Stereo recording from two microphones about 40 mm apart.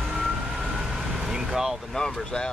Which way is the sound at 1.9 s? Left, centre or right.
Centre.